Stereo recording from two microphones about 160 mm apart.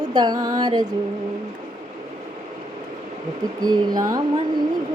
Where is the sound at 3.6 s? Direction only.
25° right (ahead or behind).